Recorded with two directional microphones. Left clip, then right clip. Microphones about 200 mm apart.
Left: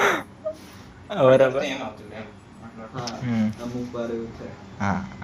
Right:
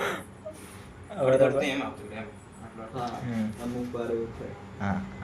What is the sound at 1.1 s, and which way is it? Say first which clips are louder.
Speech: left 9 dB; 35° left (ahead or behind).